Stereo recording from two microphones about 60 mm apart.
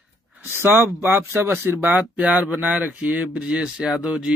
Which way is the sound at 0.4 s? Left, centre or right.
Right.